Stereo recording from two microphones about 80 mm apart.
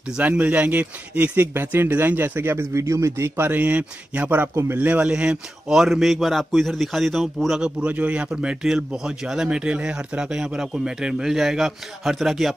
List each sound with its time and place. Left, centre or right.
0.2 s a man's voice: centre
7.6 s a man's voice: centre